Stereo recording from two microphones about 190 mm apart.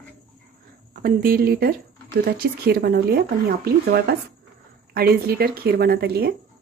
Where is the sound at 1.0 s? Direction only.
50° right (ahead or behind).